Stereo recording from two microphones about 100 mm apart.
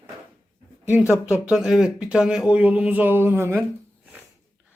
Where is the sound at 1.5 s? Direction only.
5° right (ahead or behind); by 3.5 s 25° right (ahead or behind).